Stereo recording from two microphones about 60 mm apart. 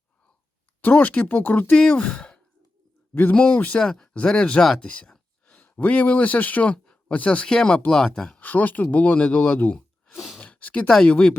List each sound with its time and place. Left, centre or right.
0.8 s speech: left
1.7 s speech: centre
3.8 s speech: centre
8.4 s speech: left
10.4 s a sound: left
11.0 s speech: centre